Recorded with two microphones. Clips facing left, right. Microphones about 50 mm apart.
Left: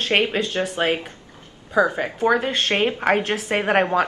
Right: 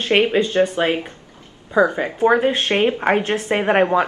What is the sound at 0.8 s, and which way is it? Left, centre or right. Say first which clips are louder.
Speech: right 2 dB; right.